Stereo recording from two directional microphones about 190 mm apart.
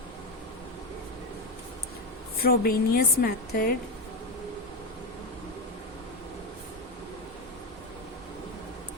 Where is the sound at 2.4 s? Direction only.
55° left (ahead or behind).